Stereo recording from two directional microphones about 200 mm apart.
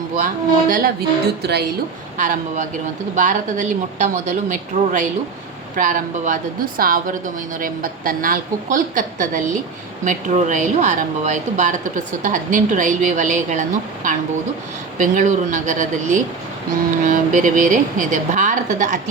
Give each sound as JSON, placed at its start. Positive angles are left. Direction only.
{"t": 0.7, "sound": "speech", "side_deg": -50}
{"t": 2.1, "sound": "speech", "side_deg": -40}